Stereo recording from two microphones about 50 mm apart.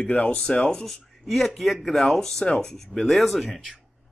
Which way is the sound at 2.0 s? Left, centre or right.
Centre.